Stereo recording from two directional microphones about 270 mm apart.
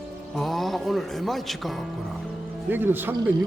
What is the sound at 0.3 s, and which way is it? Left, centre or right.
Speech, centre.